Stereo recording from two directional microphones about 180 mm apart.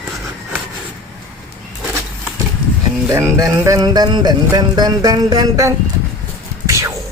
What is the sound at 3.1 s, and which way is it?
Music, 15° right (ahead or behind).